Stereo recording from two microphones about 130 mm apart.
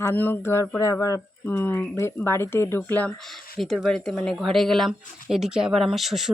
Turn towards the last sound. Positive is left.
turn(degrees=0)  # may be behind; listen again after turning